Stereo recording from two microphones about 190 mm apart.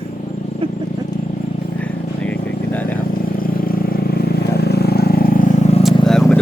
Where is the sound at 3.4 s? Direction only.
50° left (ahead or behind).